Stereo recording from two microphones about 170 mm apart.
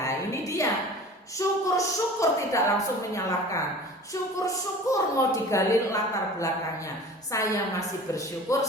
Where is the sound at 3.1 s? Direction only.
20° left (ahead or behind).